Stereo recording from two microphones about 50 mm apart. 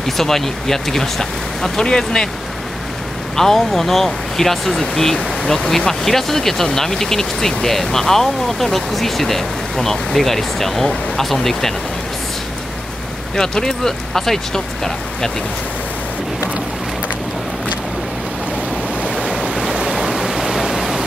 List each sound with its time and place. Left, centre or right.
0.2 s speech: centre
3.3 s speech: centre
13.4 s speech: centre
19.0 s waves: centre
19.5 s waves: centre